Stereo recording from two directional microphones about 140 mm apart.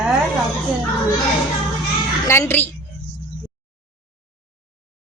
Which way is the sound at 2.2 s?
20° left (ahead or behind).